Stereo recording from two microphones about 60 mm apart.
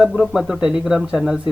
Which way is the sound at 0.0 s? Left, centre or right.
Centre.